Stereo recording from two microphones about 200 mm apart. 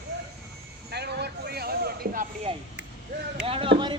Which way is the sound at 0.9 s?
55° right (ahead or behind).